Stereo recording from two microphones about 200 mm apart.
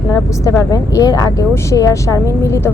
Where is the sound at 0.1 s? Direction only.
20° left (ahead or behind).